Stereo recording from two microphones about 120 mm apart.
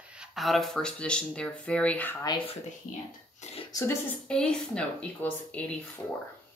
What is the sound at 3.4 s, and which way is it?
Speech, 70° left (ahead or behind).